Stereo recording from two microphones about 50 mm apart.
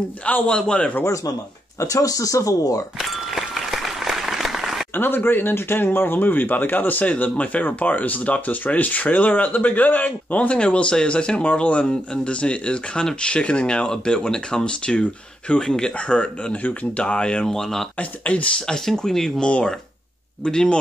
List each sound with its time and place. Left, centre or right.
0.2 s speech: left
3.0 s applause: centre
4.9 s speech: left; by 17.8 s centre
17.9 s speech: left
18.9 s speech: centre
20.4 s speech: centre